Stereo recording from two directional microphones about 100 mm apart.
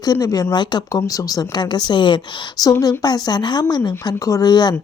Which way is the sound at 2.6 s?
35° left (ahead or behind).